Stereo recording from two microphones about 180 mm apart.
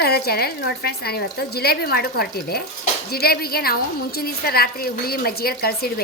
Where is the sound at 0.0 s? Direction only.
60° left (ahead or behind).